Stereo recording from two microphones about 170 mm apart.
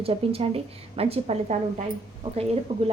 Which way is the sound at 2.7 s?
30° right (ahead or behind).